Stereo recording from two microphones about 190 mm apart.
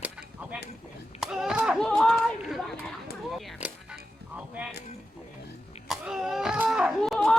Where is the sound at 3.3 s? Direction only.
Centre (ahead or behind).